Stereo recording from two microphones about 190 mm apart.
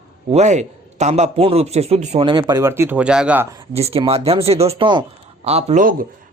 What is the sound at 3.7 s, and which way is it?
Speech, 30° right (ahead or behind).